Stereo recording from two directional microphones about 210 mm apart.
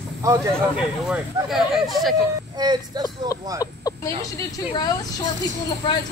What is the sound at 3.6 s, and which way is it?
Speech, 15° left (ahead or behind).